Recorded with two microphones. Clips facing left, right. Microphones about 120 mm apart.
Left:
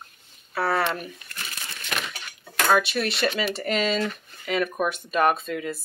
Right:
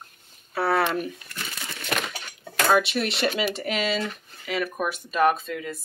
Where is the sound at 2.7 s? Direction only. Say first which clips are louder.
Even; 20° right (ahead or behind).